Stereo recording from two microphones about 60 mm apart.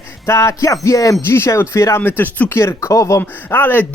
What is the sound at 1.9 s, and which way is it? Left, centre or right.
Speech, left.